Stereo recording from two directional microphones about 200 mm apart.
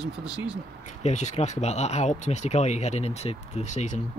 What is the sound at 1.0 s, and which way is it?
Speech, 35° left (ahead or behind).